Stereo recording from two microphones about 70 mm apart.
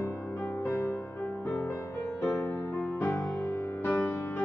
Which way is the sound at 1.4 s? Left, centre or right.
Centre.